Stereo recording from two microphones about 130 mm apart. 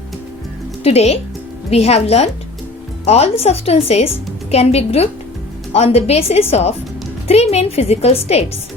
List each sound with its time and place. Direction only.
0.9 s a woman's voice: 55° left (ahead or behind)